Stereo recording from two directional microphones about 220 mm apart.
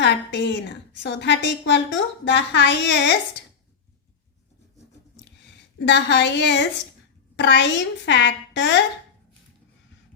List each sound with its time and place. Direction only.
0.0 s a woman's voice: 50° left (ahead or behind)
5.8 s a woman's voice: 55° left (ahead or behind)